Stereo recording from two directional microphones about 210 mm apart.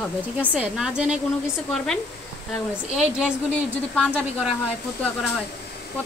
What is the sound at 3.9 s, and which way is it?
Speech, centre (ahead or behind).